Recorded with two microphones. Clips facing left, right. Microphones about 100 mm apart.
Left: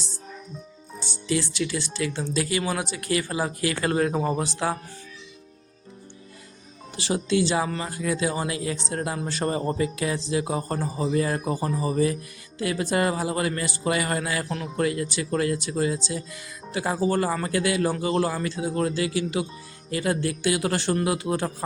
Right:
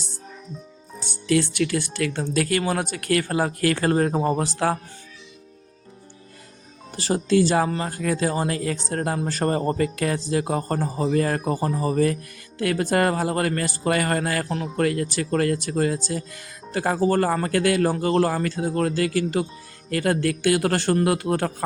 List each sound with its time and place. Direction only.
1.0 s speech: 55° right (ahead or behind)
3.8 s speech: 40° right (ahead or behind)
6.9 s speech: 45° right (ahead or behind)